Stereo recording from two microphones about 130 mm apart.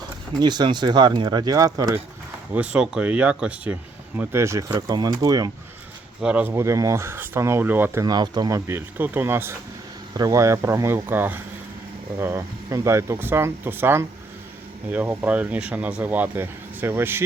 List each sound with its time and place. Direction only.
0.3 s speech: 35° right (ahead or behind)
2.5 s speech: 10° right (ahead or behind); by 5.5 s 30° right (ahead or behind)
6.2 s speech: 10° right (ahead or behind)
6.5 s speech: 25° right (ahead or behind)
8.0 s speech: 30° right (ahead or behind)